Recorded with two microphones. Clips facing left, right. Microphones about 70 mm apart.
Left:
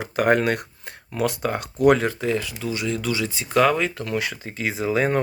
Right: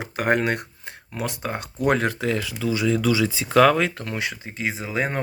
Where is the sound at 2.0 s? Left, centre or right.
Right.